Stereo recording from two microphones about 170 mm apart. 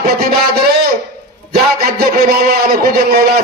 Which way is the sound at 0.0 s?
65° right (ahead or behind).